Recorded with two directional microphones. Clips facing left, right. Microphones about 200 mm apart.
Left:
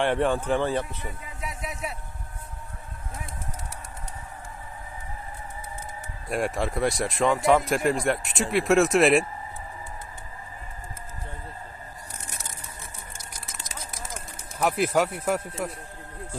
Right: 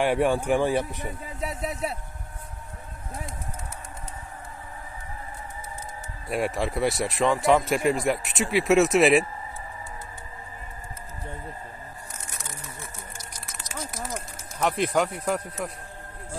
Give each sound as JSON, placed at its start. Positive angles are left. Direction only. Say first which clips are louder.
{"t": 0.0, "sound": "speech", "louder": "right 1 dB", "side_deg": -10}
{"t": 1.0, "sound": "speech", "louder": "right 4 dB", "side_deg": -35}
{"t": 6.2, "sound": "speech", "louder": "even", "side_deg": 0}
{"t": 14.6, "sound": "speech", "louder": "left 1 dB", "side_deg": 5}